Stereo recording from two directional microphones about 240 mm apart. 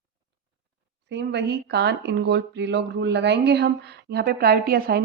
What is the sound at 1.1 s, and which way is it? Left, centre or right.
Speech, right.